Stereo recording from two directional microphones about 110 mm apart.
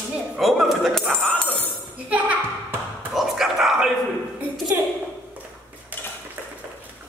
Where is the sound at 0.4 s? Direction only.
Centre (ahead or behind).